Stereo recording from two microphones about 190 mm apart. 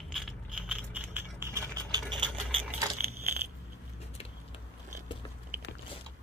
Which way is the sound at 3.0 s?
40° right (ahead or behind).